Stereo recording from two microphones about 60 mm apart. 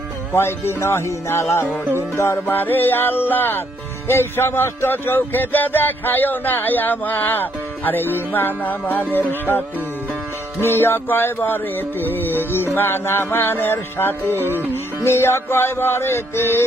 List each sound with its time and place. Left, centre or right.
0.3 s music: left
2.5 s speech: left
15.0 s music: left